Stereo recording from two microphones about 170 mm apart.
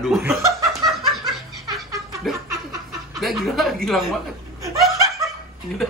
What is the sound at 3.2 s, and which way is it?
Speech, centre (ahead or behind).